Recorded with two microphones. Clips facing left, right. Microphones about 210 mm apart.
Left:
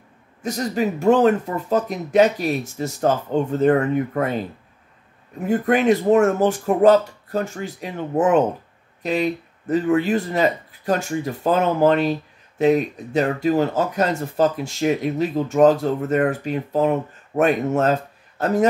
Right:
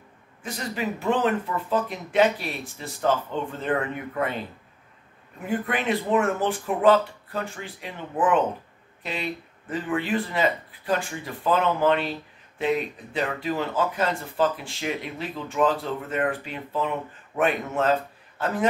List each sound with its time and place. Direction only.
0.4 s speech: 40° left (ahead or behind)
5.5 s speech: 45° left (ahead or behind)